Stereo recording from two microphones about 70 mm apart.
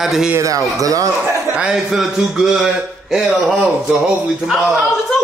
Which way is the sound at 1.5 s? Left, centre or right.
Centre.